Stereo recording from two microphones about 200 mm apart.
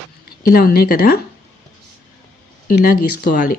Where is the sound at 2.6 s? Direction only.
45° left (ahead or behind).